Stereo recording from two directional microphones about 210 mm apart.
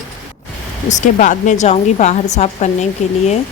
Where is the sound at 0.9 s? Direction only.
35° left (ahead or behind).